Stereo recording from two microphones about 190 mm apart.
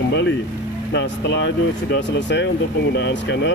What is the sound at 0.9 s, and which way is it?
Speech, 65° left (ahead or behind).